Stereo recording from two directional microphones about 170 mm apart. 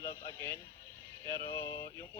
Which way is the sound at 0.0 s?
15° left (ahead or behind).